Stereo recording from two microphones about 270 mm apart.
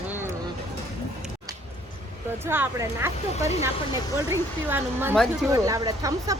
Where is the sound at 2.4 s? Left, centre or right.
Centre.